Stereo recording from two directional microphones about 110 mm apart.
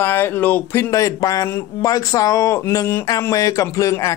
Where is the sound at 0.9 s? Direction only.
30° left (ahead or behind).